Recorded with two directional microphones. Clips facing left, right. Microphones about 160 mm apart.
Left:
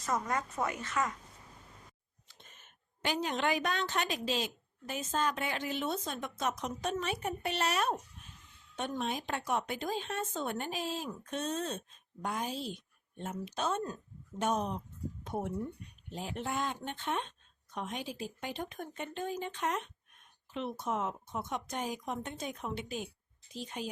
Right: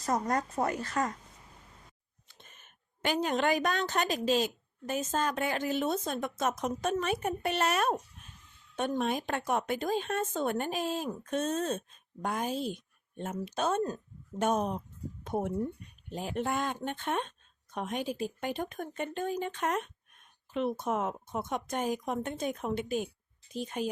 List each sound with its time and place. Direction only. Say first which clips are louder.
0.0 s a woman's voice: right 4 dB; 40° right (ahead or behind)
3.0 s a woman's voice: right 4 dB; 50° right (ahead or behind)